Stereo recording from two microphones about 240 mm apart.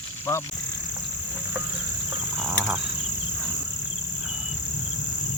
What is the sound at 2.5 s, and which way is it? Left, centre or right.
Cricket, centre.